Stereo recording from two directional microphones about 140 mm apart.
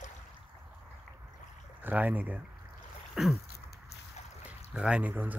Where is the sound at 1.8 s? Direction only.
10° right (ahead or behind).